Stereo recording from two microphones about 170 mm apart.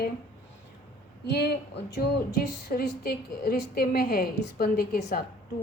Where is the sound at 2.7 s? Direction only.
60° left (ahead or behind).